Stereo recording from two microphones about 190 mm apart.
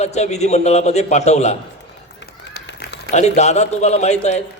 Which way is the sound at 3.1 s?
35° left (ahead or behind).